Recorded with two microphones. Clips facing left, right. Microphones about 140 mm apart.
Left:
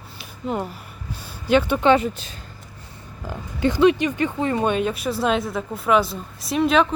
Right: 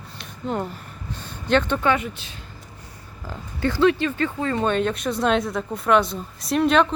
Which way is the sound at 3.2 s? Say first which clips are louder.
Left 3 dB; 15° left (ahead or behind).